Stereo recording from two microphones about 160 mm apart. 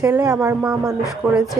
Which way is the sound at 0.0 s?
15° right (ahead or behind).